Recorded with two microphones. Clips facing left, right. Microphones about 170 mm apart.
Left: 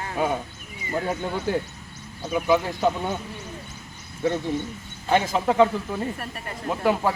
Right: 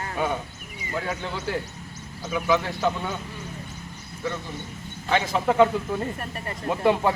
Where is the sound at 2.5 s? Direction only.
15° left (ahead or behind).